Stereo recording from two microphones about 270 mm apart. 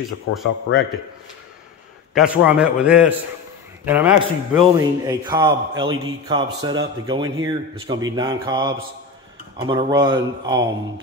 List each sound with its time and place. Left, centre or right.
0.7 s a man's voice: left
2.1 s a man's voice: centre